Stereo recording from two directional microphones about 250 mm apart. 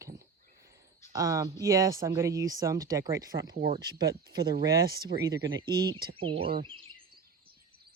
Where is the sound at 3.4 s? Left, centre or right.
Right.